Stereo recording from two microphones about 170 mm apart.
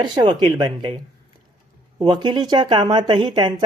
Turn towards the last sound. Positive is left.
turn(degrees=-25)  # may be behind; listen again after turning